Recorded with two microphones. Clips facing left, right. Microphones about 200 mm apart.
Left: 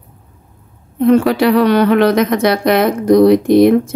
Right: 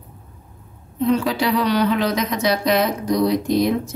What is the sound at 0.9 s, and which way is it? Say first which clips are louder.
A woman's voice: left 8 dB; 60° left (ahead or behind).